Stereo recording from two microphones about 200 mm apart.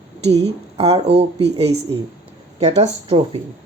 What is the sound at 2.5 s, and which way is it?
Speech, 30° right (ahead or behind).